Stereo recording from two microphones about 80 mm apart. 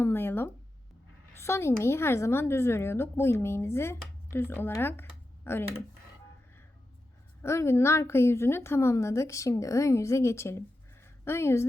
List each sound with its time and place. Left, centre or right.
0.0 s a sound: left
1.4 s a woman's voice: left
7.4 s a woman's voice: left